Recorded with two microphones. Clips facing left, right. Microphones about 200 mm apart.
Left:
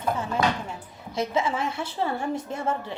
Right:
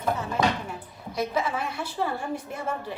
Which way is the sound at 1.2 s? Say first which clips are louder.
Left 2 dB; 25° left (ahead or behind).